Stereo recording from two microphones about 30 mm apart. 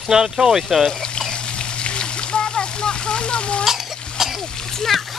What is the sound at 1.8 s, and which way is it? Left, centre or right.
Splash, left.